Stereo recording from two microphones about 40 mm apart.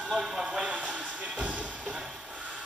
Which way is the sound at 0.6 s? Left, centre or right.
Right.